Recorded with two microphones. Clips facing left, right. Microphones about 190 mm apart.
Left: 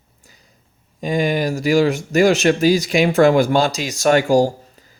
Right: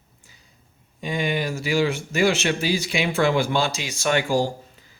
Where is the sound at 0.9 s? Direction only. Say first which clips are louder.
Left 6 dB; 45° left (ahead or behind).